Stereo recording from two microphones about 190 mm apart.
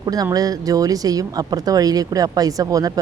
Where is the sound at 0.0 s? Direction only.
20° right (ahead or behind).